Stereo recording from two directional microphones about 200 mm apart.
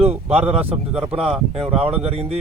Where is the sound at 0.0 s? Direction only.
30° right (ahead or behind).